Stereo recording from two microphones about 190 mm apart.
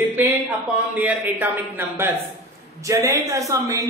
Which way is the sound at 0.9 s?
10° right (ahead or behind).